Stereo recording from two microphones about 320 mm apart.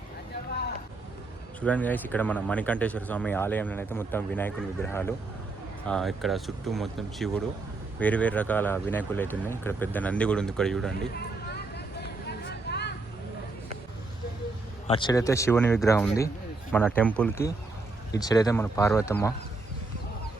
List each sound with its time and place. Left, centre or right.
1.6 s speech: centre
12.4 s a sound: left
14.8 s speech: centre